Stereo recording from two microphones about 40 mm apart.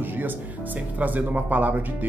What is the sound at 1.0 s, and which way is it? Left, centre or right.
Speech, right.